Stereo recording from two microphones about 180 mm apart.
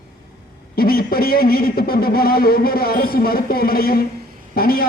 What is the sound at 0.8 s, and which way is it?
A man's voice, 55° left (ahead or behind).